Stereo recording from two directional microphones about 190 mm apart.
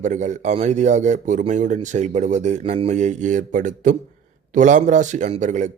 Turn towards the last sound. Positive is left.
turn(degrees=-40)  # may be behind; listen again after turning